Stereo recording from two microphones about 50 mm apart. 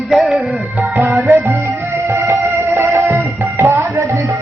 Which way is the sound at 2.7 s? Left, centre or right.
Right.